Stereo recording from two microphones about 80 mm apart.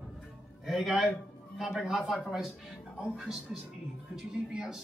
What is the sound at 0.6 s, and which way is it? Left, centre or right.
A man's voice, centre.